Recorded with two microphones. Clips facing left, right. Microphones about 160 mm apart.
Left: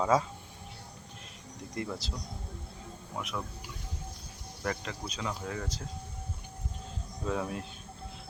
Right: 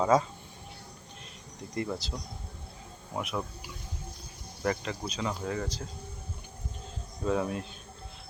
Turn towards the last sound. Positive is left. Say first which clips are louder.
# right 4 dB
turn(degrees=0)  # may be behind; listen again after turning